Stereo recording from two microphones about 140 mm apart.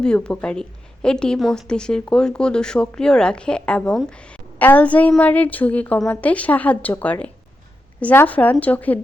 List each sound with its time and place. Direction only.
0.0 s a woman's voice: 5° left (ahead or behind)